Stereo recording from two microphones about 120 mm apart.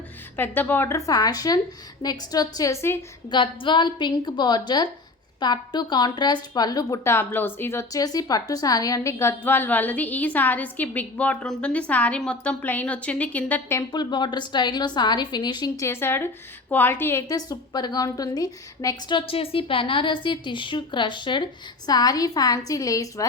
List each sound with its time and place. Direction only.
0.3 s a woman's voice: 15° left (ahead or behind)
3.2 s a woman's voice: 45° left (ahead or behind); by 13.7 s 10° left (ahead or behind)
13.7 s a woman's voice: 35° left (ahead or behind)
15.8 s a woman's voice: 20° left (ahead or behind)
19.1 s a woman's voice: 50° left (ahead or behind); by 23.2 s 30° left (ahead or behind)